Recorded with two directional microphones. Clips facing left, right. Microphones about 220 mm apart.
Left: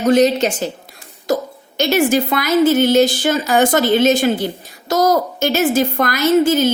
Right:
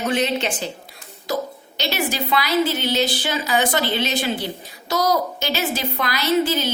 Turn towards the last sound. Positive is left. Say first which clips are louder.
# left 7 dB
turn(degrees=45)  # may be behind; listen again after turning